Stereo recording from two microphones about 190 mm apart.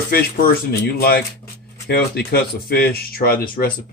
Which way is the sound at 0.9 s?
55° left (ahead or behind).